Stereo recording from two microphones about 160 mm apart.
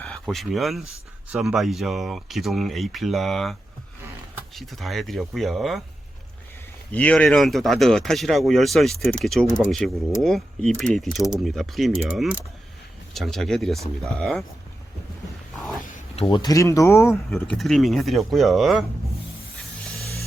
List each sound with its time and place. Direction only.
0.0 s speech: 5° left (ahead or behind)
6.9 s speech: 10° left (ahead or behind)
15.8 s zipper: 55° left (ahead or behind)
16.1 s speech: 30° left (ahead or behind); by 17.6 s 15° left (ahead or behind)
17.6 s speech: centre (ahead or behind)